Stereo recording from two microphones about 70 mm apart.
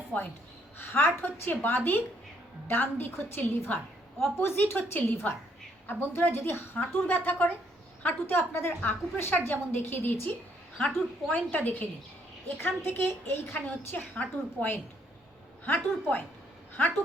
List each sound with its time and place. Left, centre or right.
0.1 s a woman's voice: left
13.5 s a woman's voice: left